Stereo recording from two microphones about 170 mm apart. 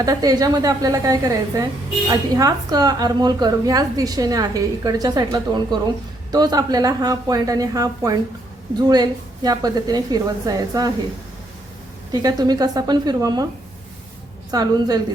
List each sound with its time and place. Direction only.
0.0 s speech: 20° right (ahead or behind)
12.1 s speech: 25° right (ahead or behind)
14.5 s speech: 25° right (ahead or behind)